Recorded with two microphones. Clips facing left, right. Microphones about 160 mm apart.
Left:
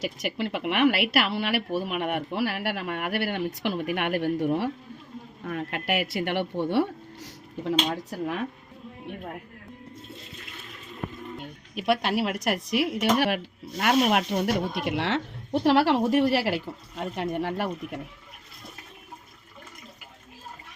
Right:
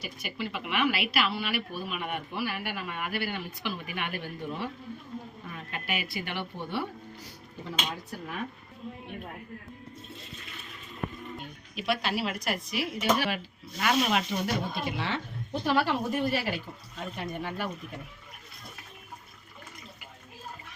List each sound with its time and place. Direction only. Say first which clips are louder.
0.0 s a woman's voice: left 7 dB; 85° left
11.7 s speech: left 5 dB; 55° left (ahead or behind); by 16.6 s 90° left
17.2 s a woman's voice: left 7 dB; 75° left (ahead or behind)